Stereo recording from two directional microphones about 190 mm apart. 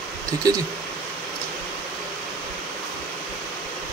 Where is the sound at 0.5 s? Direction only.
20° right (ahead or behind).